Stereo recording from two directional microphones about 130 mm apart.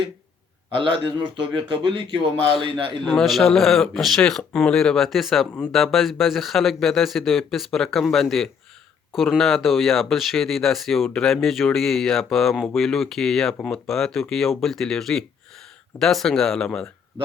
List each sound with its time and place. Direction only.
0.8 s a man's voice: 40° right (ahead or behind)
3.0 s speech: centre (ahead or behind)